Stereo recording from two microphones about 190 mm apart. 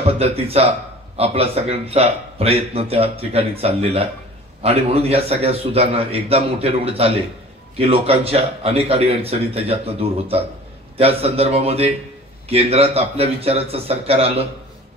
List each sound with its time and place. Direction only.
0.0 s a man's voice: 30° right (ahead or behind)